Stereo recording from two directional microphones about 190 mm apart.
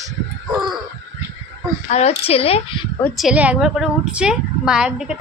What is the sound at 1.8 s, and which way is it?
Speech, 35° left (ahead or behind).